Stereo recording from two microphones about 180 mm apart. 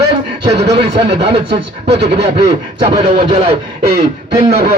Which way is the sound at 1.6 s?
35° right (ahead or behind).